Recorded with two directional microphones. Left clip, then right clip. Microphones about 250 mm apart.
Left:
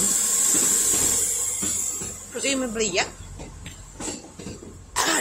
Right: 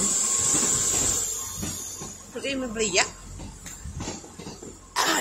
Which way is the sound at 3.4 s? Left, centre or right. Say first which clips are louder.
Left 2 dB; left.